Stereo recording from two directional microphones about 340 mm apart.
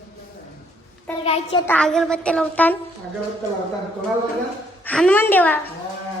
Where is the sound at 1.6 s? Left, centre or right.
Centre.